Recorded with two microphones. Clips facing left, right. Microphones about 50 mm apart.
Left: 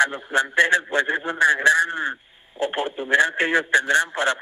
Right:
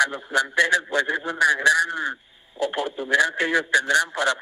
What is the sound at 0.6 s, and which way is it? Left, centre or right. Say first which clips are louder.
A man's voice: left 2 dB; left.